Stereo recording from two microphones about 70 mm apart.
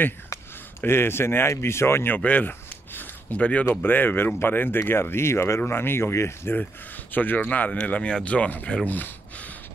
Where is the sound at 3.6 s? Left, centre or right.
Left.